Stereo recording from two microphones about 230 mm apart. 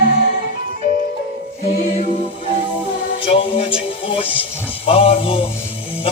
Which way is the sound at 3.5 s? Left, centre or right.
Left.